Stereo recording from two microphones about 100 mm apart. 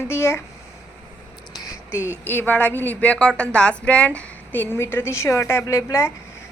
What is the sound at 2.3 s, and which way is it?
A woman's voice, 20° left (ahead or behind).